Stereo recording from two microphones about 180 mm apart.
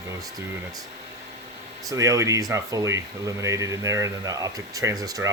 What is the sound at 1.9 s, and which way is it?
Speech, 20° right (ahead or behind).